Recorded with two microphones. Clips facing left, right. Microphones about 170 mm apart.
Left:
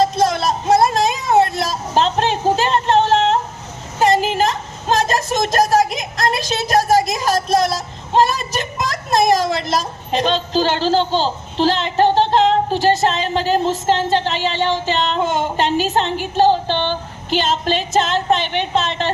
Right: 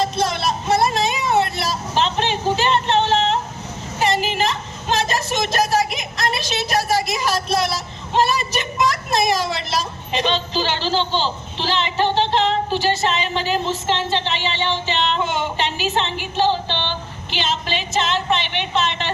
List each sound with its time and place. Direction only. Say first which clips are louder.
0.0 s music: left 5 dB; 45° left (ahead or behind)
4.0 s a sound: left 5 dB; 45° left (ahead or behind)
7.1 s child singing: left 4 dB; 45° left (ahead or behind)